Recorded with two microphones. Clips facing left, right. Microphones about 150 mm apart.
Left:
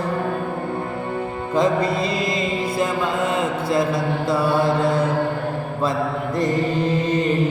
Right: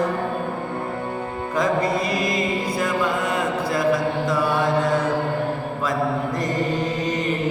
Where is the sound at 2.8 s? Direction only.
25° left (ahead or behind).